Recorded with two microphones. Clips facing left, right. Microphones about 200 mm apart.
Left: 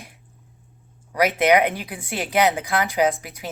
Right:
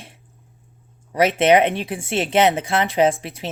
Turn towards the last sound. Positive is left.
turn(degrees=-30)  # may be behind; listen again after turning